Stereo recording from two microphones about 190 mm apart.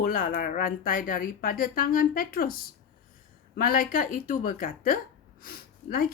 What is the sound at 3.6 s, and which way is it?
A woman's voice, 50° left (ahead or behind).